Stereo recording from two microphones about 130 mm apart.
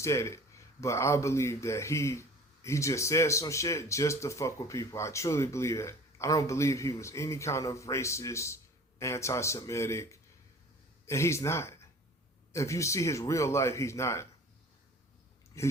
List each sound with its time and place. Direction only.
0.0 s speech: 20° left (ahead or behind)